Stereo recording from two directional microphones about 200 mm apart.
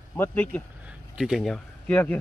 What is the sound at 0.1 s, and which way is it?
Speech, 10° left (ahead or behind).